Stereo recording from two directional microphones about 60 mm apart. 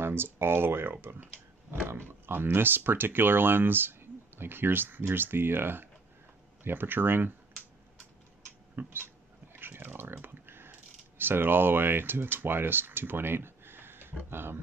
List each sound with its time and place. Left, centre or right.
0.0 s speech: right
8.7 s a sound: right
14.3 s speech: right